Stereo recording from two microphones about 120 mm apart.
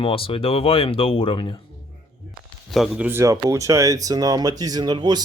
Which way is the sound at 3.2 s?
25° right (ahead or behind).